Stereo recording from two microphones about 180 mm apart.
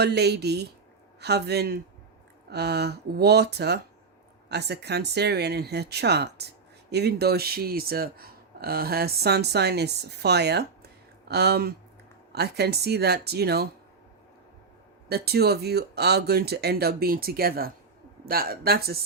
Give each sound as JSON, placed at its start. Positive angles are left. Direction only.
{"t": 0.0, "sound": "speech", "side_deg": -65}
{"t": 15.1, "sound": "speech", "side_deg": -60}